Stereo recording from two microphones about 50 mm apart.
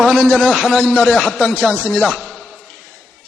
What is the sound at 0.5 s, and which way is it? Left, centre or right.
Speech, centre.